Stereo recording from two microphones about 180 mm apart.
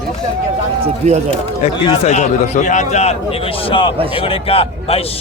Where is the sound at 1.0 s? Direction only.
35° right (ahead or behind).